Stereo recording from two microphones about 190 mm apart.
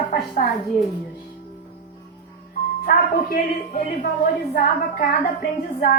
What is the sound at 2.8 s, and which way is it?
Speech, 50° left (ahead or behind).